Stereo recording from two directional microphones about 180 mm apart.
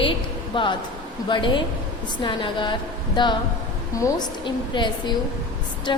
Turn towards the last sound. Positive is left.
turn(degrees=25)  # may be behind; listen again after turning